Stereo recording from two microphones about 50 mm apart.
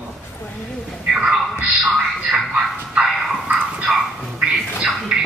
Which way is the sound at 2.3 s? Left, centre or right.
Centre.